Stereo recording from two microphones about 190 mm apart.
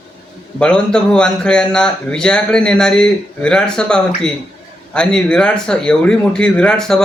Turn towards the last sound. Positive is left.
turn(degrees=5)  # may be behind; listen again after turning